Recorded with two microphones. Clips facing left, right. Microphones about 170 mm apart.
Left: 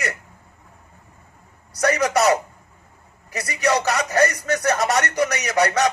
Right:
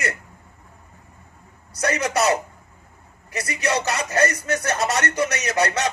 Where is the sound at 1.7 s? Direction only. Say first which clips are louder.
Left 3 dB; 25° right (ahead or behind).